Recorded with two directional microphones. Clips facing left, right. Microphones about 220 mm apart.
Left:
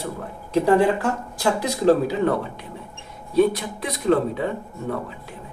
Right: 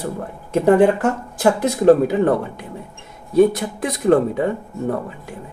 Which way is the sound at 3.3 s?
50° right (ahead or behind).